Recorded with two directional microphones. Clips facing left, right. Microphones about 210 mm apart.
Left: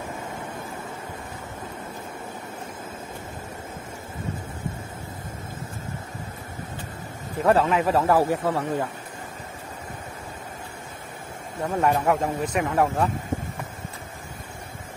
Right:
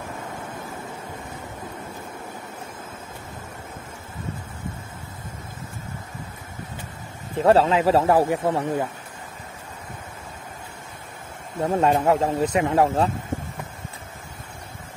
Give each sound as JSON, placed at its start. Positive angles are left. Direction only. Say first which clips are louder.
{"t": 7.3, "sound": "speech", "louder": "right 3 dB", "side_deg": -30}
{"t": 11.6, "sound": "speech", "louder": "right 3 dB", "side_deg": -25}